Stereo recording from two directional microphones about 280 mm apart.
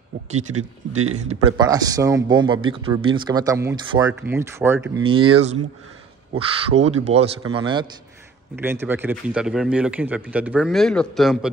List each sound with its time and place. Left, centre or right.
0.5 s speech: right
1.1 s speech: right
1.7 s speech: centre
5.0 s speech: centre